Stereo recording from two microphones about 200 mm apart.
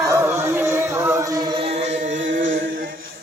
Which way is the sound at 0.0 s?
15° right (ahead or behind).